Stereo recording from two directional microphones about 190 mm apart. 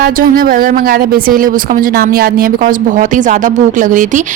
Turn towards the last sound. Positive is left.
turn(degrees=-45)  # may be behind; listen again after turning